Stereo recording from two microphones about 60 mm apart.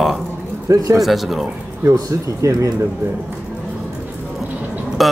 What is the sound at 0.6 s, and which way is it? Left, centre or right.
Speech, right.